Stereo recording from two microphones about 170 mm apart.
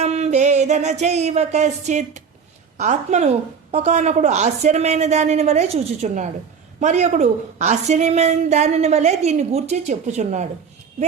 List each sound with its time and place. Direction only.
0.0 s music: 40° right (ahead or behind)
2.7 s a woman's voice: 40° right (ahead or behind)